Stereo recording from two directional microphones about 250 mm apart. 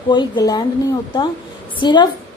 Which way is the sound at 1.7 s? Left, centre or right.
Centre.